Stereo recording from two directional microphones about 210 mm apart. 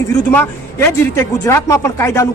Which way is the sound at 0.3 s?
10° left (ahead or behind).